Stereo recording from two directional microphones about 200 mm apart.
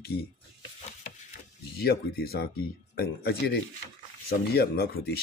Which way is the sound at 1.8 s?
50° left (ahead or behind).